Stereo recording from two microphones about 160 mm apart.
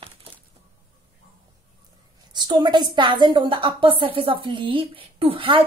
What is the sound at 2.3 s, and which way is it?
A woman's voice, 30° right (ahead or behind).